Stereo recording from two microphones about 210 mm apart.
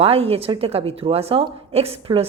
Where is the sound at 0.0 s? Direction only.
25° right (ahead or behind).